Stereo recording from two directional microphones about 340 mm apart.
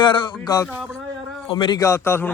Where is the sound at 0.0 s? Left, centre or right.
Centre.